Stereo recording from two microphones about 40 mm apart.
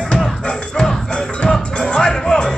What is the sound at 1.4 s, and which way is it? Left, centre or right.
Music, left.